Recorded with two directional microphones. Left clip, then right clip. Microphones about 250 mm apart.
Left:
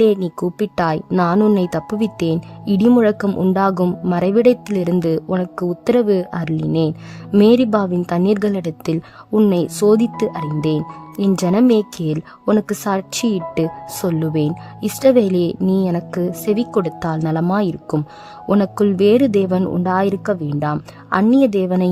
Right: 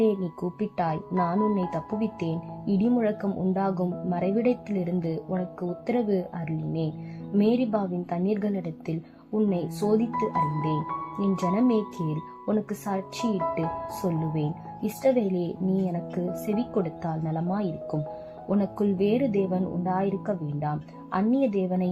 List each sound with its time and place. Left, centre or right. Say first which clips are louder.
0.0 s speech: left 10 dB; left